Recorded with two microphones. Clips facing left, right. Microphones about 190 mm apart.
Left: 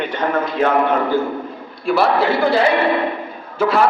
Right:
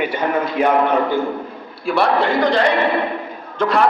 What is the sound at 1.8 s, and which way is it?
Speech, centre (ahead or behind).